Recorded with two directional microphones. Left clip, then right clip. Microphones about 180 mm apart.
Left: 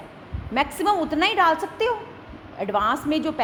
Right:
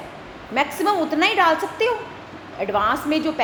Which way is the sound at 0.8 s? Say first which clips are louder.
Right 2 dB; 40° left (ahead or behind).